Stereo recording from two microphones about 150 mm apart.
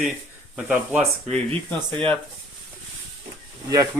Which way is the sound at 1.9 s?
35° right (ahead or behind).